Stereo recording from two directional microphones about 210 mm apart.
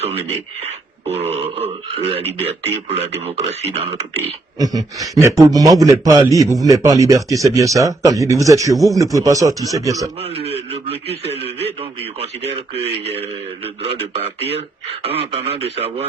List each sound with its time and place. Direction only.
1.0 s speech: 30° right (ahead or behind)
4.5 s a man's voice: 15° right (ahead or behind)
10.3 s speech: 30° right (ahead or behind)
13.8 s speech: 25° right (ahead or behind)